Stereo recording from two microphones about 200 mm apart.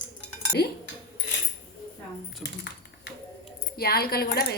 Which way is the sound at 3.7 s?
50° left (ahead or behind).